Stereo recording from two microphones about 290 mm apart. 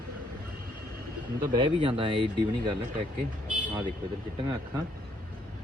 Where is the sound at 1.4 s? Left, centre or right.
Centre.